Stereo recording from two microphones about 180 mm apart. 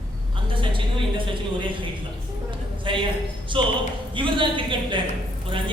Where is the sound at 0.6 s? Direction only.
30° right (ahead or behind).